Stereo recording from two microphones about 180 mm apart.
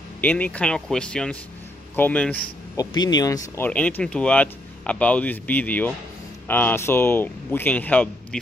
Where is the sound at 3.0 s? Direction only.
20° left (ahead or behind).